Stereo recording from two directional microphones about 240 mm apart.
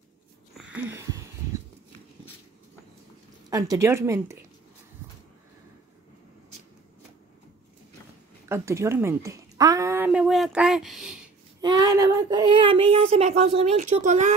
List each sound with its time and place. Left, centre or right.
0.6 s wheeze: centre
3.4 s a woman's voice: centre
8.5 s a woman's voice: centre
11.6 s speech: centre